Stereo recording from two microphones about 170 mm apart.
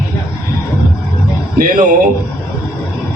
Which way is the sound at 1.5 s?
50° right (ahead or behind).